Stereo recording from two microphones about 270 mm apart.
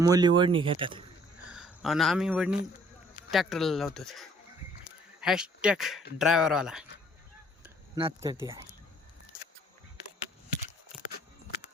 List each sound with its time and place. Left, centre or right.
0.0 s speech: centre
1.5 s speech: centre
7.9 s speech: centre